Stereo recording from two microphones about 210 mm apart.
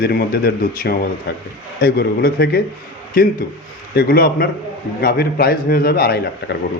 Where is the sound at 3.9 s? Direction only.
45° left (ahead or behind).